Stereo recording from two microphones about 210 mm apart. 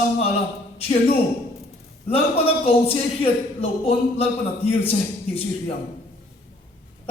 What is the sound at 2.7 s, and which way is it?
Speech, 25° left (ahead or behind).